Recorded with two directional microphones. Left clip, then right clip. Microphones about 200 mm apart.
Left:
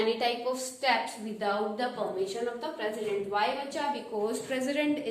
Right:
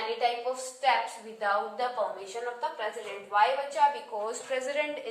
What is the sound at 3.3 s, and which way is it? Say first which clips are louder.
A woman's voice: right 8 dB; 20° left (ahead or behind).